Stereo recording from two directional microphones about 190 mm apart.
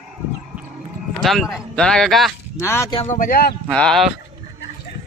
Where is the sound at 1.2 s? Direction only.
Centre (ahead or behind).